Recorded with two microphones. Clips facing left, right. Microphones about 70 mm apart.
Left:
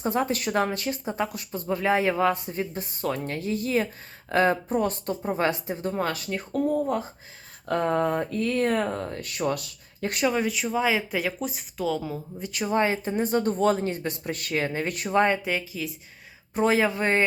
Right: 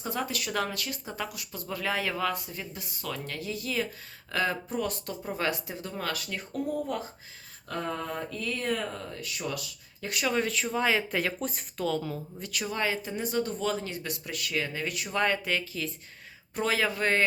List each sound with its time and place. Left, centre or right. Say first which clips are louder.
0.0 s speech: left 7 dB; left
10.2 s speech: left 3 dB; centre
12.4 s speech: left 8 dB; left
16.6 s speech: left 6 dB; left